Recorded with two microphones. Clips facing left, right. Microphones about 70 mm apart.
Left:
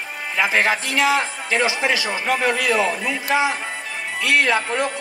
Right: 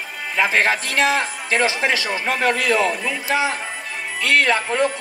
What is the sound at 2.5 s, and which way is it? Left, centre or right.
Speech, centre.